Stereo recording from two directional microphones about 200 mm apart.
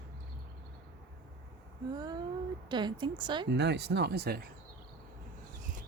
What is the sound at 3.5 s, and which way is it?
Speech, 60° right (ahead or behind).